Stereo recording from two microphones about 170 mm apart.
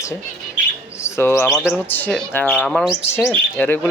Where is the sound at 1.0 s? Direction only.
15° left (ahead or behind).